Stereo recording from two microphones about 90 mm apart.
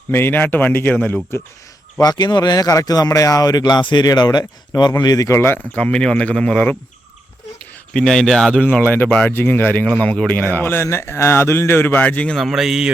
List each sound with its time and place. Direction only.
0.1 s a man's voice: 25° left (ahead or behind)
2.0 s speech: 50° left (ahead or behind)
5.4 s speech: 20° left (ahead or behind)
7.9 s speech: 5° left (ahead or behind)
8.6 s a man's voice: 20° left (ahead or behind)
12.4 s speech: 5° right (ahead or behind)